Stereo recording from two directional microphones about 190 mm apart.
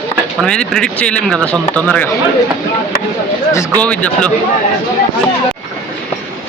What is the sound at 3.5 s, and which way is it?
Speech, 5° left (ahead or behind).